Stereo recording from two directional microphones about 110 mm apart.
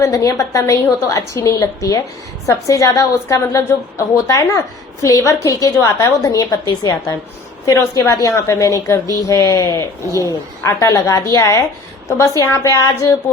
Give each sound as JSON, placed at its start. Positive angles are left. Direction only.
{"t": 0.0, "sound": "a woman's voice", "side_deg": 30}